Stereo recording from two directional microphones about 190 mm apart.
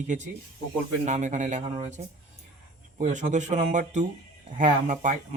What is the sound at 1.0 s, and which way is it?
Speech, 40° right (ahead or behind).